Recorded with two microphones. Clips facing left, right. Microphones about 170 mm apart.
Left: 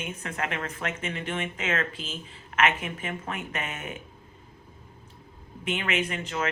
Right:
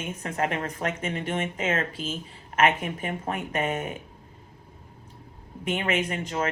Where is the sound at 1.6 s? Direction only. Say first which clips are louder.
Right 2 dB; 30° right (ahead or behind).